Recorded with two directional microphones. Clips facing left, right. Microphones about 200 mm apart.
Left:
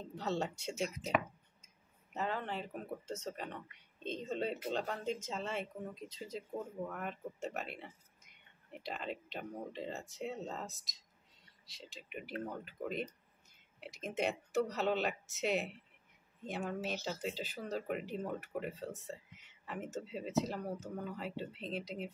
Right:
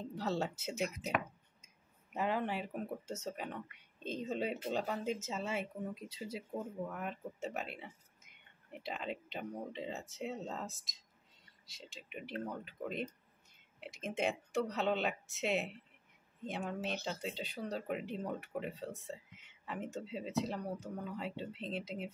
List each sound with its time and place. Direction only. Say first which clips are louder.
0.1 s speech: even; centre (ahead or behind)
2.1 s speech: right 3 dB; 10° right (ahead or behind)